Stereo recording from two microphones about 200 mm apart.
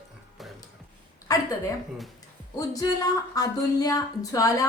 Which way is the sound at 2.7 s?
20° left (ahead or behind).